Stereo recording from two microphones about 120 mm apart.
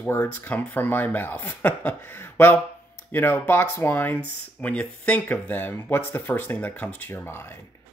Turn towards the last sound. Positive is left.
turn(degrees=20)  # may be behind; listen again after turning